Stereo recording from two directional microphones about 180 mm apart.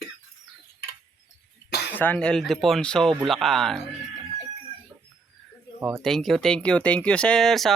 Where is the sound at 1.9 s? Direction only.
10° left (ahead or behind).